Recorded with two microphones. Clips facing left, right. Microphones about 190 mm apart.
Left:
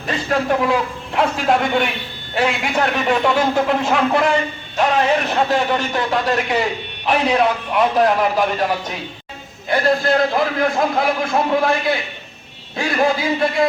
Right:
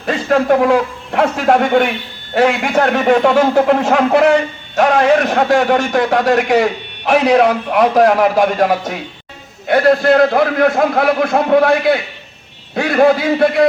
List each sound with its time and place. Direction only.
0.1 s a man's voice: 65° right (ahead or behind)
4.1 s a man's voice: 70° right (ahead or behind)